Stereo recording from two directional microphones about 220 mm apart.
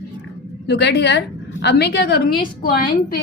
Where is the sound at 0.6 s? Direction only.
50° left (ahead or behind).